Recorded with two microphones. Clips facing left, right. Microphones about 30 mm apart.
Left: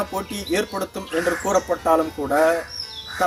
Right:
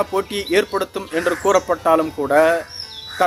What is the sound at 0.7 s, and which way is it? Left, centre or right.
Speech, right.